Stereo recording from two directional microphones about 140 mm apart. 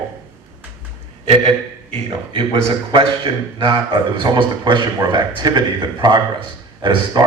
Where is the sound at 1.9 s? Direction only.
40° right (ahead or behind).